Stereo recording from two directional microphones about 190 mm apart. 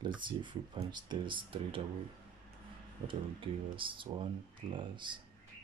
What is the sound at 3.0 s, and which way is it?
Speech, 25° right (ahead or behind).